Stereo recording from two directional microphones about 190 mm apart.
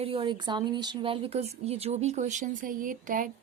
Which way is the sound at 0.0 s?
30° right (ahead or behind).